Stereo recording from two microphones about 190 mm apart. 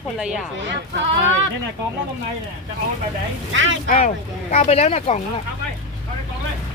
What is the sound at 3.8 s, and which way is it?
Speech, 45° left (ahead or behind).